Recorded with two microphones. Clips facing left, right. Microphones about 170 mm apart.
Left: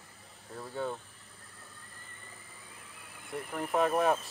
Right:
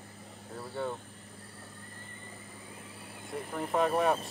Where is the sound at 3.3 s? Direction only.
5° left (ahead or behind).